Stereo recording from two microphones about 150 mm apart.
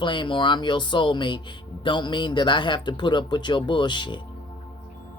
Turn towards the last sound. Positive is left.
turn(degrees=30)  # may be behind; listen again after turning